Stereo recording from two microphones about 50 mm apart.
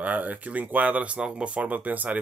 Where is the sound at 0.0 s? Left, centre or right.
Right.